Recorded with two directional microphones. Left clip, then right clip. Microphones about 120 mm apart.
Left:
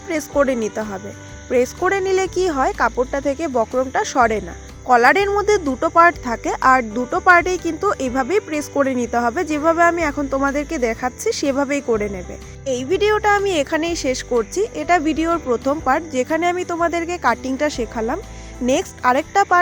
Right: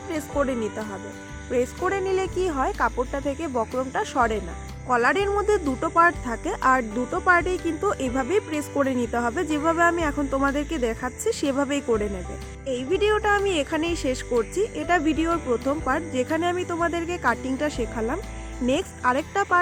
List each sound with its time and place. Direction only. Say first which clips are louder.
0.1 s speech: left 8 dB; 70° left (ahead or behind); by 6.8 s 50° left (ahead or behind)
7.1 s speech: left 7 dB; 75° left (ahead or behind); by 12.0 s 40° left (ahead or behind)
12.6 s speech: left 5 dB; 60° left (ahead or behind)